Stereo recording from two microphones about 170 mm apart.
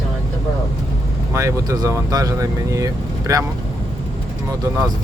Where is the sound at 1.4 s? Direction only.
20° right (ahead or behind).